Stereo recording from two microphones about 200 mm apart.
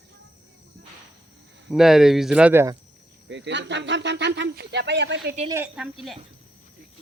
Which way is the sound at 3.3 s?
60° right (ahead or behind).